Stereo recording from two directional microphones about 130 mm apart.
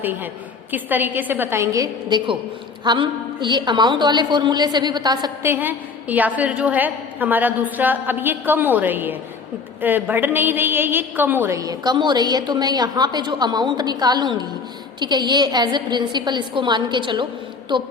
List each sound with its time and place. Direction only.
0.0 s a woman's voice: 15° right (ahead or behind); by 5.3 s 30° right (ahead or behind)
5.4 s a woman's voice: 15° right (ahead or behind); by 17.8 s 40° right (ahead or behind)